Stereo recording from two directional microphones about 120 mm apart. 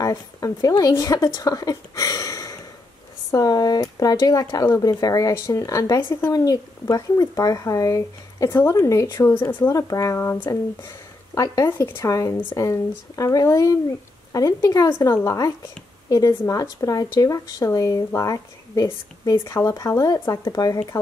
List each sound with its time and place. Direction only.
0.0 s a woman's voice: 30° left (ahead or behind)
9.6 s a woman's voice: 30° left (ahead or behind)